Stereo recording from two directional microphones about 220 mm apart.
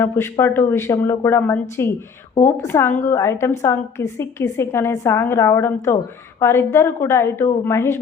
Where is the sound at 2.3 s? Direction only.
30° left (ahead or behind).